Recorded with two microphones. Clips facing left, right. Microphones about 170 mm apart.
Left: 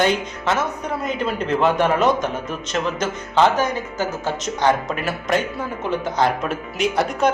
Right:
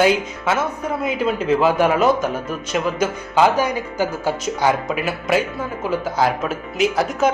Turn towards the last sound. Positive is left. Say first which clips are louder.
# right 1 dB
turn(degrees=0)  # may be behind; listen again after turning